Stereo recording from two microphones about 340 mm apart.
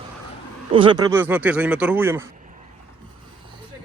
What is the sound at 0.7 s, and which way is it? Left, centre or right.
A man's voice, centre.